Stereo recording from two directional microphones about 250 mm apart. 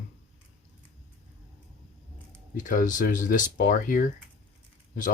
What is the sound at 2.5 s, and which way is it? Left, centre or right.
Speech, left.